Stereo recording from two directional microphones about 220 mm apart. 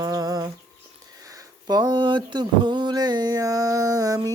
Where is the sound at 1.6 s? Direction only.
20° right (ahead or behind).